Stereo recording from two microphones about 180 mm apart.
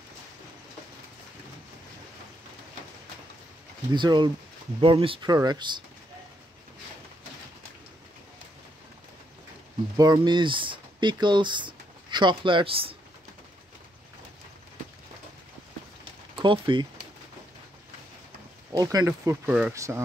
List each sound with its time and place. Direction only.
3.9 s speech: 25° right (ahead or behind)
9.9 s speech: 20° right (ahead or behind)
16.3 s speech: 25° right (ahead or behind)
18.7 s speech: 20° right (ahead or behind)